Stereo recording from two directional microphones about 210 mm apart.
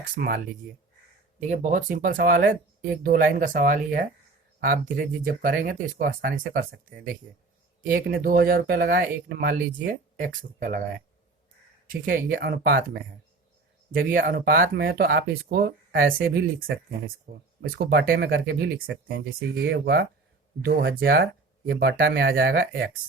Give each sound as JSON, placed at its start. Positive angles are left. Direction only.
{"t": 0.2, "sound": "speech", "side_deg": -45}
{"t": 7.8, "sound": "speech", "side_deg": -45}
{"t": 11.9, "sound": "speech", "side_deg": -40}